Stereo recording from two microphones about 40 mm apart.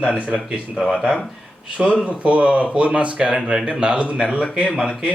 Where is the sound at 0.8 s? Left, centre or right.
Centre.